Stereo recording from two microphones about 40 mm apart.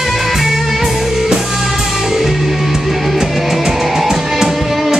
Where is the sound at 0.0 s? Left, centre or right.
Centre.